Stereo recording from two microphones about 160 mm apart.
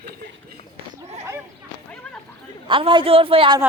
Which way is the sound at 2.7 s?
30° right (ahead or behind).